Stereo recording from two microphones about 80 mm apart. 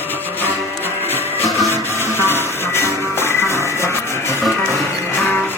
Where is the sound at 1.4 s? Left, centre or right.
Centre.